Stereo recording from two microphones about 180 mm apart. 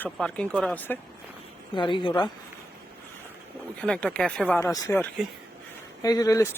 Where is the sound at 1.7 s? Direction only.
25° left (ahead or behind).